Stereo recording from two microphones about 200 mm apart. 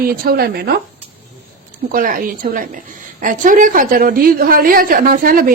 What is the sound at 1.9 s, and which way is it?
A woman's voice, 45° right (ahead or behind).